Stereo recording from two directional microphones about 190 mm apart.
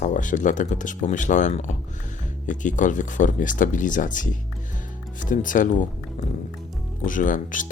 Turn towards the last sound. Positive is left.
turn(degrees=45)  # may be behind; listen again after turning